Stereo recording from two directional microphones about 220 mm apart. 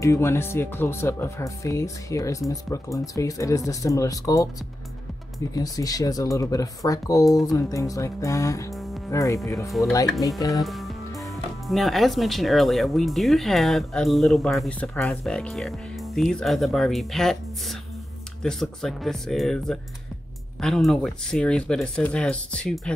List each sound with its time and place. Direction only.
0.0 s speech: 10° left (ahead or behind)
5.5 s speech: 15° left (ahead or behind)
9.7 s speech: centre (ahead or behind)